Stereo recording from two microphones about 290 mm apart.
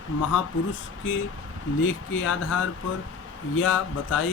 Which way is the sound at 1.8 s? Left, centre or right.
Left.